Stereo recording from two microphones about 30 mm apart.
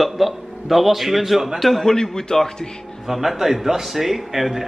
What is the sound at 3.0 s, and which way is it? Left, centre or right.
Speech, centre.